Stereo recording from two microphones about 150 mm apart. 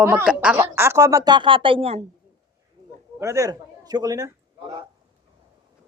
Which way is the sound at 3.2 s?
20° right (ahead or behind).